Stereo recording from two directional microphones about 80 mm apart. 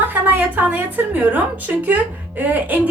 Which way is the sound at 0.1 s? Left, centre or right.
Right.